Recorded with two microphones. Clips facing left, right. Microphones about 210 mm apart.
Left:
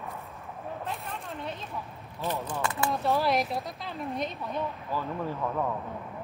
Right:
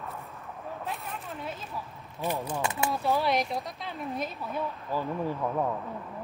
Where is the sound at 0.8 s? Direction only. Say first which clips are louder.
Even; centre (ahead or behind).